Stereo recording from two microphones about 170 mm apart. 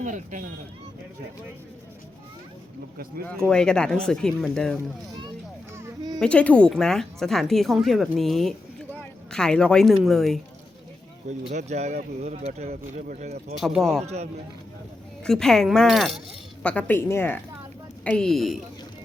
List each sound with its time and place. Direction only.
0.0 s speech: 50° right (ahead or behind)
3.4 s a woman's voice: 5° left (ahead or behind)
5.7 s a sound: 20° right (ahead or behind)
6.1 s a woman's voice: 5° left (ahead or behind)
11.3 s speech: 45° right (ahead or behind)
13.6 s a woman's voice: centre (ahead or behind)
15.2 s a woman's voice: 5° left (ahead or behind)